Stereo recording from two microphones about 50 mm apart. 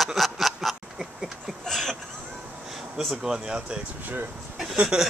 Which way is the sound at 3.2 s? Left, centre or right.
Centre.